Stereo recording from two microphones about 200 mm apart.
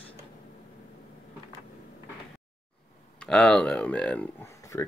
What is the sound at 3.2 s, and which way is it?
Speech, 5° left (ahead or behind).